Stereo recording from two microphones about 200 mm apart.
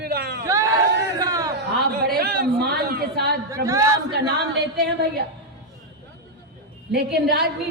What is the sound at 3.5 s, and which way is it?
Speech, 15° right (ahead or behind).